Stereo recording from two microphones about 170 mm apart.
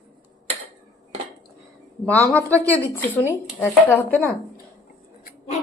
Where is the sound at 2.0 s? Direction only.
10° left (ahead or behind).